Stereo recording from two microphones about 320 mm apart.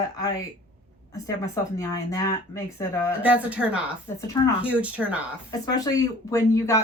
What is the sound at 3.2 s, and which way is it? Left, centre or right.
Speech, centre.